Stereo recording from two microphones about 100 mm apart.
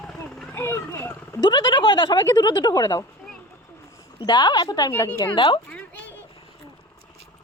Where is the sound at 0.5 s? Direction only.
25° left (ahead or behind).